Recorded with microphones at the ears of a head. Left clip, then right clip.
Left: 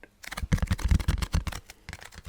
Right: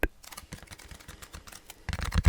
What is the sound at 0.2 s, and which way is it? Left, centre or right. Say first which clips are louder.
Camera: left 11 dB; left.